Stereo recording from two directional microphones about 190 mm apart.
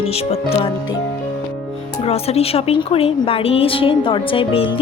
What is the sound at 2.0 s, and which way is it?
A woman's voice, 35° left (ahead or behind).